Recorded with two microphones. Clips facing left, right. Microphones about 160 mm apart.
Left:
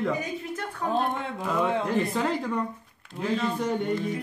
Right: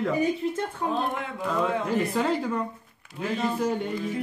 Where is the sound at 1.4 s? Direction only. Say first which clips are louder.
Even; centre (ahead or behind).